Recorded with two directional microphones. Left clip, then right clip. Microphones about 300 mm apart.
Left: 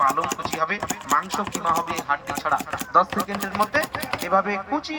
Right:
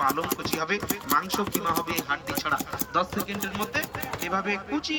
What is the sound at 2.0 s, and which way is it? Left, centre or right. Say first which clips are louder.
Speech: left 4 dB; centre.